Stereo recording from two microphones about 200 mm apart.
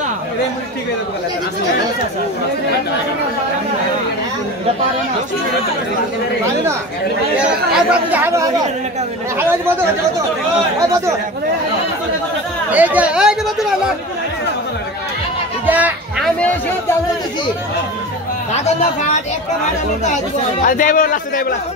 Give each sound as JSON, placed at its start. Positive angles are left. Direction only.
{"t": 7.3, "sound": "speech", "side_deg": -5}
{"t": 12.7, "sound": "speech", "side_deg": -10}
{"t": 15.6, "sound": "a sound", "side_deg": -10}
{"t": 20.6, "sound": "a man's voice", "side_deg": 45}